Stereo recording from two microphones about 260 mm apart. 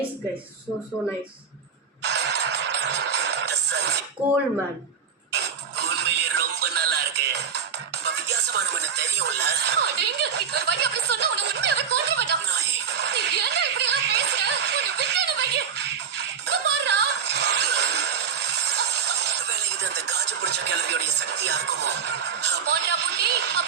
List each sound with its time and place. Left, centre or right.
2.0 s music: right
5.3 s music: right
8.0 s music: right
13.0 s snicker: right
19.8 s speech: right